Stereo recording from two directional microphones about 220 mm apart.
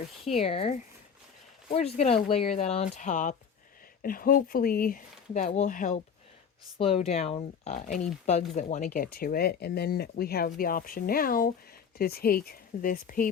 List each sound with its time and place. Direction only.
0.3 s speech: 25° left (ahead or behind)
1.7 s speech: 30° left (ahead or behind)